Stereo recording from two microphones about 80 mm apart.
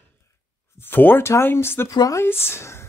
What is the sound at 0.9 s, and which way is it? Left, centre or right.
Speech, left.